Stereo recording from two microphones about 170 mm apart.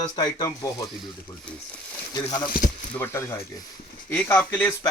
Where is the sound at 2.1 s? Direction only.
25° left (ahead or behind).